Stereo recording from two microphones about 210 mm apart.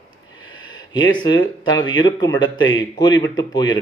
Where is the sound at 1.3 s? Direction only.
20° left (ahead or behind).